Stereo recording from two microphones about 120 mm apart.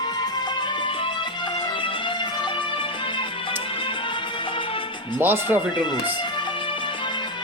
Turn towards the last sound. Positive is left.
turn(degrees=-15)  # may be behind; listen again after turning